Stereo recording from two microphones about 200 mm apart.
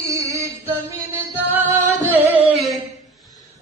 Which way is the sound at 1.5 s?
10° right (ahead or behind).